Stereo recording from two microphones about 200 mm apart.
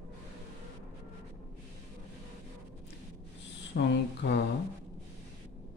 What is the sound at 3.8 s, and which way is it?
Speech, 60° left (ahead or behind).